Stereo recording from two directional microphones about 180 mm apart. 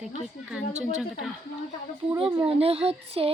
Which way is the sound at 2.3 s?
30° right (ahead or behind).